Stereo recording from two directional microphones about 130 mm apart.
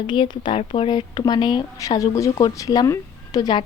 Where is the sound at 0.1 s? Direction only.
40° left (ahead or behind).